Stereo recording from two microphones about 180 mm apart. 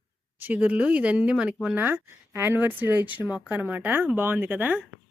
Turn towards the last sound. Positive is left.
turn(degrees=-10)  # may be behind; listen again after turning